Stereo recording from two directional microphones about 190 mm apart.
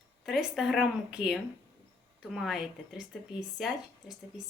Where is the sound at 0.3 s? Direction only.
Centre (ahead or behind).